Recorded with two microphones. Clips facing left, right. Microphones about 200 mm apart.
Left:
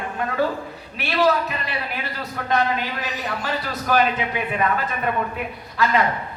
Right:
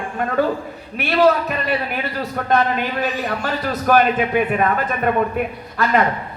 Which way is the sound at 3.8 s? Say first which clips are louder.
Right 5 dB; 50° right (ahead or behind).